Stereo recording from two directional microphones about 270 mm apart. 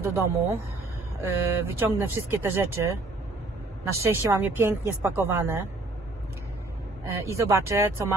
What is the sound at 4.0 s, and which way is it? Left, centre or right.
Speech, centre.